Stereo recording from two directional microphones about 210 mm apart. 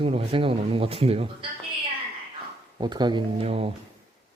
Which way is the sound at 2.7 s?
20° right (ahead or behind).